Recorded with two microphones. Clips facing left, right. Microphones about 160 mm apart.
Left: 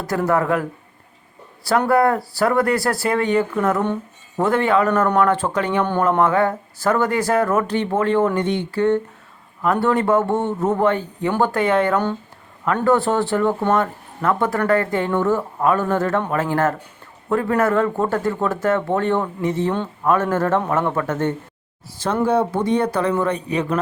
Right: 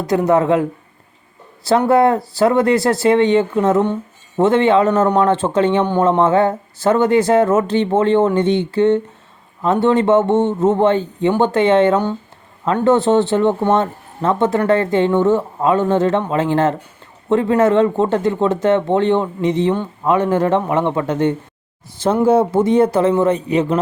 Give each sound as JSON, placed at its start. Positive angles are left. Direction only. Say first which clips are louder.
{"t": 0.0, "sound": "speech", "louder": "right 5 dB", "side_deg": -20}
{"t": 1.9, "sound": "speech", "louder": "right 3 dB", "side_deg": -20}
{"t": 5.8, "sound": "speech", "louder": "right 4 dB", "side_deg": -15}
{"t": 6.1, "sound": "speech", "louder": "right 3 dB", "side_deg": -25}